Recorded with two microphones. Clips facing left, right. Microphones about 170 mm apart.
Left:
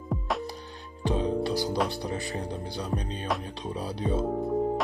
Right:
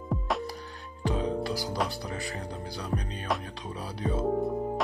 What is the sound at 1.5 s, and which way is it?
Music, centre (ahead or behind).